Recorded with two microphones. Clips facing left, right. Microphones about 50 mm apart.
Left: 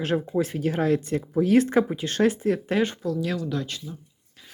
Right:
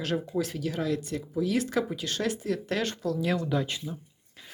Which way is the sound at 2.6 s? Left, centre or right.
Centre.